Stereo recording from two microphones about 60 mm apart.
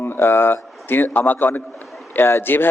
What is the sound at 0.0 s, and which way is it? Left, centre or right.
A man's voice, left.